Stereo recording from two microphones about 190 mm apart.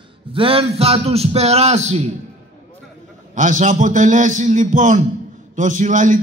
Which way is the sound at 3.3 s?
40° right (ahead or behind).